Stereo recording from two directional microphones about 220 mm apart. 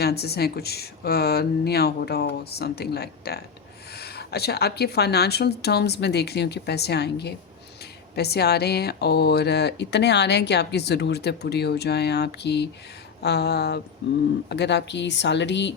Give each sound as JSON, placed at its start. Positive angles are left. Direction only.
{"t": 0.0, "sound": "speech", "side_deg": 45}